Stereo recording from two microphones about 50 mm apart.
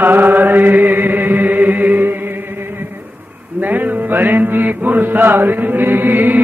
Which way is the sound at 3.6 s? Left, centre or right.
Right.